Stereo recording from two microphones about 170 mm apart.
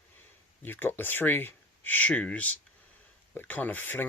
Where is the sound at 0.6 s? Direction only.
10° left (ahead or behind).